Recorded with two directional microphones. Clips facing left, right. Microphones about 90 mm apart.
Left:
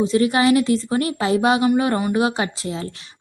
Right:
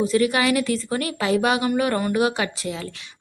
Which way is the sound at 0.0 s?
25° left (ahead or behind).